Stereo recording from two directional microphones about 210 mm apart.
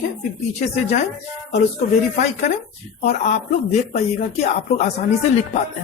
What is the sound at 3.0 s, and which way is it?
Speech, 35° left (ahead or behind).